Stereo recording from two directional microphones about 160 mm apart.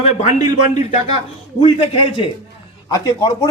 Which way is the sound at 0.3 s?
45° left (ahead or behind).